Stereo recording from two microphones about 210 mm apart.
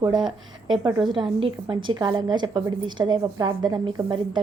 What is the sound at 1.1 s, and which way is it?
A woman's voice, 20° right (ahead or behind).